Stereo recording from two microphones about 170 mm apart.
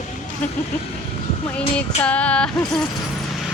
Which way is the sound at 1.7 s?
5° left (ahead or behind).